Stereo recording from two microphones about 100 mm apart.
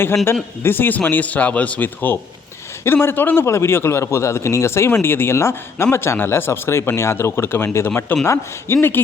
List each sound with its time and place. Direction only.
0.6 s a man's voice: 20° left (ahead or behind)